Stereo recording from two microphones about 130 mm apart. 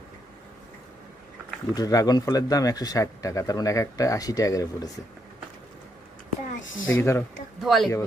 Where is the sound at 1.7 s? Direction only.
25° left (ahead or behind).